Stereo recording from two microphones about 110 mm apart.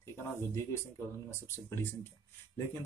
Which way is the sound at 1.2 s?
25° left (ahead or behind).